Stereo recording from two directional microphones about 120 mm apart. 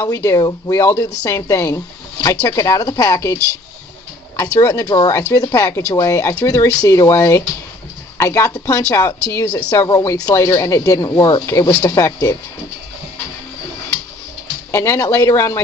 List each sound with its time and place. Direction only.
0.0 s speech: 30° left (ahead or behind)
14.7 s speech: 25° left (ahead or behind)